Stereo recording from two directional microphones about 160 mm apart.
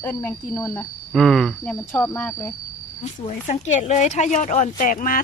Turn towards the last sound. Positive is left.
turn(degrees=60)  # may be behind; listen again after turning